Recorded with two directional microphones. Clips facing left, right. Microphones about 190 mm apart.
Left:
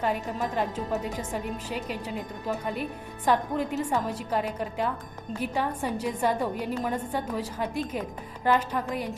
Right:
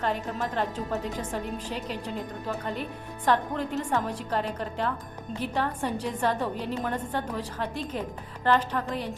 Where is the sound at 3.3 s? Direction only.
10° left (ahead or behind).